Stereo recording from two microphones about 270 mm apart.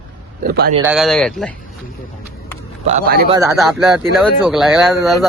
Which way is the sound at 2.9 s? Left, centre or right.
Right.